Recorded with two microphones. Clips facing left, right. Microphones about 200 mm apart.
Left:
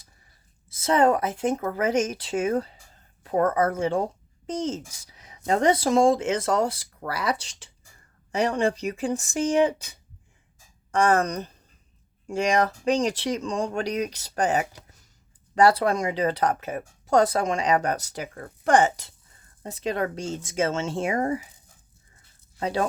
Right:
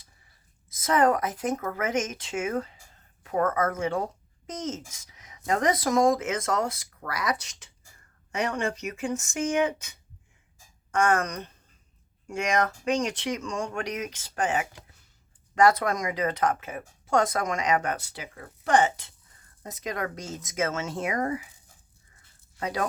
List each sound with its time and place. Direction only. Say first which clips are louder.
0.7 s speech: left 2 dB; 30° left (ahead or behind)
19.6 s speech: left 5 dB; 30° left (ahead or behind)
22.6 s speech: left 4 dB; 30° left (ahead or behind)